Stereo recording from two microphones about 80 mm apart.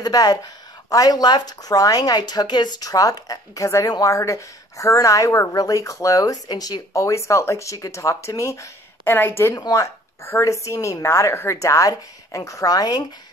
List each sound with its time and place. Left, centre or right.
0.0 s speech: left
6.9 s a woman's voice: left
9.0 s a woman's voice: left
9.6 s a woman's voice: left